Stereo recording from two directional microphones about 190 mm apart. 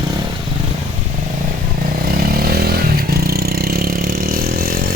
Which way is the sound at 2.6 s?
55° right (ahead or behind).